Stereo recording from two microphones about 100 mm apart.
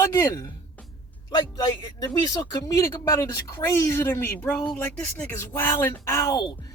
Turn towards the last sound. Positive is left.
turn(degrees=25)  # may be behind; listen again after turning